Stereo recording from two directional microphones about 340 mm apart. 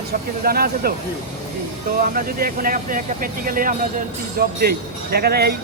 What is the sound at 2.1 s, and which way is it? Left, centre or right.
Speech, right.